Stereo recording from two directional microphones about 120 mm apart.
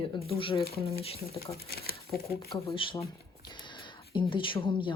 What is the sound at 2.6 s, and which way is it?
Speech, 45° left (ahead or behind).